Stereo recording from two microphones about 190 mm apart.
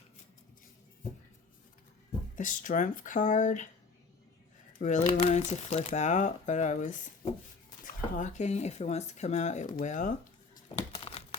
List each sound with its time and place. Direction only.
2.3 s speech: 45° left (ahead or behind)
4.8 s speech: 40° left (ahead or behind)
10.8 s crumpling: 30° left (ahead or behind)